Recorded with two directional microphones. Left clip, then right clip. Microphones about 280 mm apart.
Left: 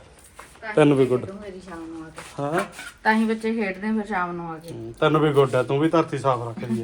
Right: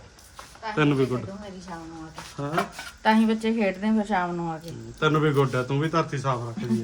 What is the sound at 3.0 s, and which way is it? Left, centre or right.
Speech, right.